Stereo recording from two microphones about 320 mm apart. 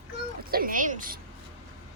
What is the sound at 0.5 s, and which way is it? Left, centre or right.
Speech, right.